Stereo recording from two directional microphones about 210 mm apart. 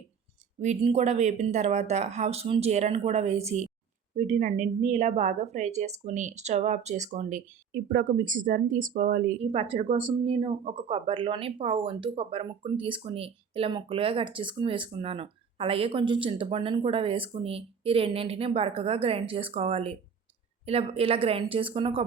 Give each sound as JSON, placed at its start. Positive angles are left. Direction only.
{"t": 0.6, "sound": "a woman's voice", "side_deg": -35}